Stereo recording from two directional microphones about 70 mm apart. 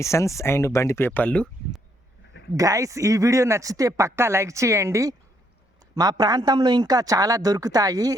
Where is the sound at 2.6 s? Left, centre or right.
Right.